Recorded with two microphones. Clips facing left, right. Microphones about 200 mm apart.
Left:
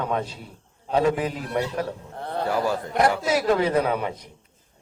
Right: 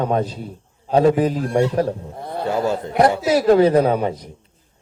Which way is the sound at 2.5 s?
25° right (ahead or behind).